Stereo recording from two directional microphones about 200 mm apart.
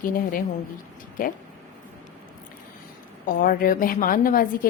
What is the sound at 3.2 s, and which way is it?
A woman's voice, 45° left (ahead or behind).